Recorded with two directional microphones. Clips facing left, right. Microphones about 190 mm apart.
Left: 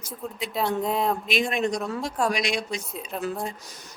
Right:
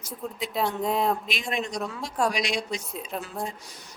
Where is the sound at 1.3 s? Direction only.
55° left (ahead or behind).